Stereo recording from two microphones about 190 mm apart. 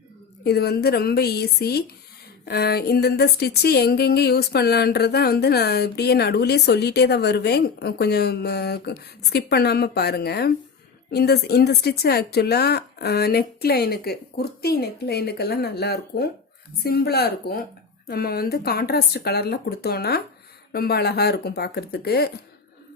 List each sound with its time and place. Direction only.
0.4 s speech: 55° left (ahead or behind)